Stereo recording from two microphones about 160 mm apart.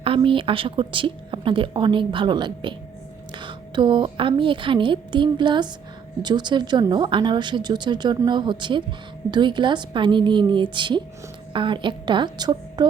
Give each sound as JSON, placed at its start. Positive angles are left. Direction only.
{"t": 0.0, "sound": "a woman's voice", "side_deg": -35}